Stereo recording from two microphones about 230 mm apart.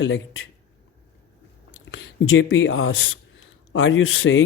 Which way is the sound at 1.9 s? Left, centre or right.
Left.